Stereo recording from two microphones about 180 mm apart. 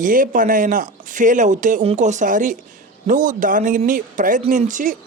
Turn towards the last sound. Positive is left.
turn(degrees=-45)  # may be behind; listen again after turning